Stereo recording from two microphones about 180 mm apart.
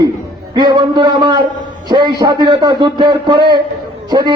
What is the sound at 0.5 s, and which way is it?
A man's voice, 25° right (ahead or behind).